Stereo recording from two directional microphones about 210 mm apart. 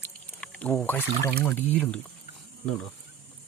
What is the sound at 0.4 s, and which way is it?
Speech, 5° left (ahead or behind).